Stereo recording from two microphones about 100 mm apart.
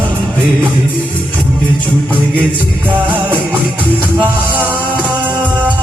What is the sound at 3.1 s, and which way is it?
Music, 15° right (ahead or behind).